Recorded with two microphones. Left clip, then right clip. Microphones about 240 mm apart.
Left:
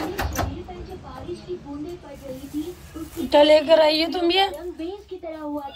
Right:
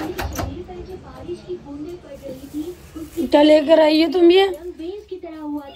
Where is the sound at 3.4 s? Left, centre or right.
Left.